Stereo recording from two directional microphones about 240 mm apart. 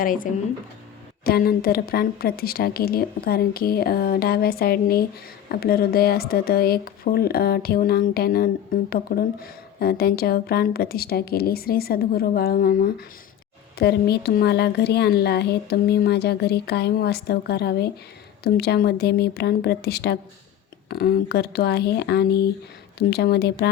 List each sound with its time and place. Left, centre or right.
0.0 s a woman's voice: left